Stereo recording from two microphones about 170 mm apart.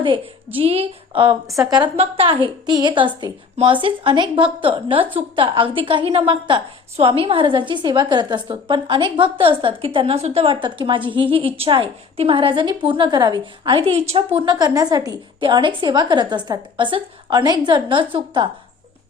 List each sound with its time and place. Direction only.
0.0 s a woman's voice: 30° right (ahead or behind)